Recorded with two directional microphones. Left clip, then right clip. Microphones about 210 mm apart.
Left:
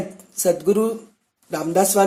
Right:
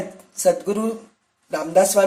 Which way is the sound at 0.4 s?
35° left (ahead or behind).